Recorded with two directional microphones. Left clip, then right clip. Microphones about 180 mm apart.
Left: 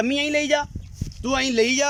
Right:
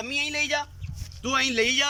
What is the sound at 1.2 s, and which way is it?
Speech, 25° left (ahead or behind).